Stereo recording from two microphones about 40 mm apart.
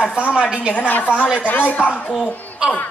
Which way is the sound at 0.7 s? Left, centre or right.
Left.